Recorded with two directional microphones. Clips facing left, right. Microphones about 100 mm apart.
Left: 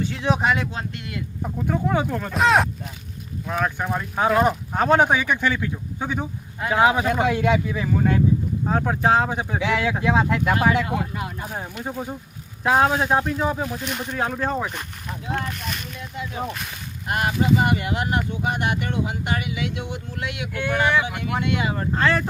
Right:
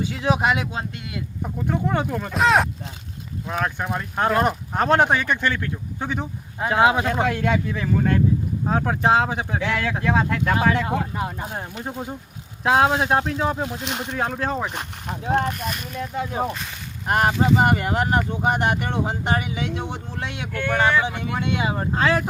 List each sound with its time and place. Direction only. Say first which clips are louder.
0.0 s speech: right 1 dB; 5° right (ahead or behind)
0.7 s speech: right 1 dB; 20° right (ahead or behind)
1.4 s speech: even; centre (ahead or behind)
9.6 s speech: left 3 dB; 10° left (ahead or behind)
11.1 s speech: right 3 dB; 30° right (ahead or behind)
12.6 s speech: right 1 dB; 5° right (ahead or behind)
13.6 s speech: even; 20° right (ahead or behind)
14.1 s speech: left 1 dB; centre (ahead or behind)
14.8 s speech: right 3 dB; 35° right (ahead or behind)
15.5 s speech: right 3 dB; centre (ahead or behind)
16.0 s speech: right 8 dB; 40° right (ahead or behind)
20.5 s speech: right 1 dB; 15° left (ahead or behind)
21.0 s speech: even; 25° right (ahead or behind)
21.9 s speech: right 1 dB; 10° right (ahead or behind)